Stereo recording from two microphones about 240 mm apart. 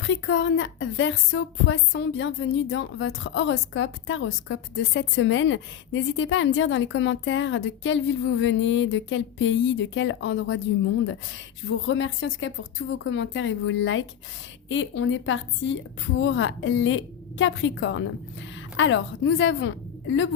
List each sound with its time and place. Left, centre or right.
0.0 s a woman's voice: left
11.9 s a woman's voice: left